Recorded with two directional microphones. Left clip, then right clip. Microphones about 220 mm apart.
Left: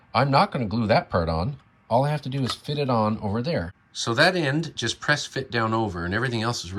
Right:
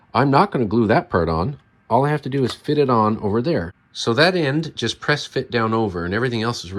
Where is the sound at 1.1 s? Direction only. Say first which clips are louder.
Right 5 dB; 55° right (ahead or behind).